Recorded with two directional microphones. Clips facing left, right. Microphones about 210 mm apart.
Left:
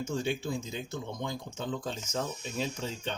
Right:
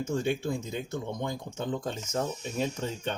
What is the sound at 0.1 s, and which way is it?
Speech, 55° right (ahead or behind).